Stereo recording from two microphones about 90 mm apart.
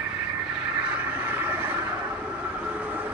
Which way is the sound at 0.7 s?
15° right (ahead or behind).